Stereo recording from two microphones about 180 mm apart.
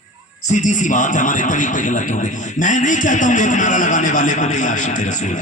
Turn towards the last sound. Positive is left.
turn(degrees=40)  # may be behind; listen again after turning